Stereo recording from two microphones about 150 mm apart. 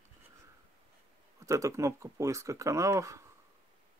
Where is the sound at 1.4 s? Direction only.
20° right (ahead or behind).